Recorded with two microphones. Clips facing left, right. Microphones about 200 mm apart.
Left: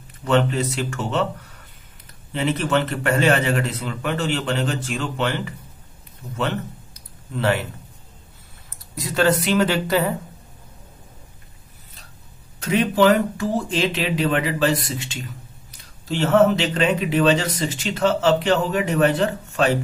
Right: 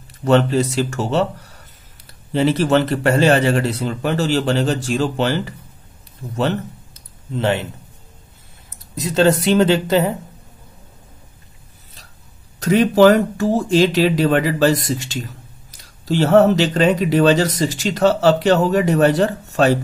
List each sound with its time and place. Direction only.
0.2 s a man's voice: 40° right (ahead or behind)
7.3 s speech: 20° right (ahead or behind)
8.9 s speech: 25° right (ahead or behind)
12.5 s speech: 40° right (ahead or behind)